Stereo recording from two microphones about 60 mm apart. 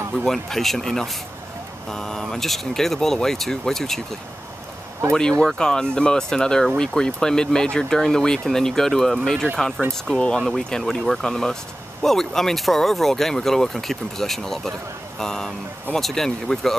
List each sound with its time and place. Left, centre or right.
0.1 s speech: centre
5.4 s speech: centre
10.1 s speech: centre
10.4 s speech: centre